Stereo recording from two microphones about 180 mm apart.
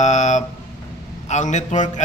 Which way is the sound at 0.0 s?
40° left (ahead or behind).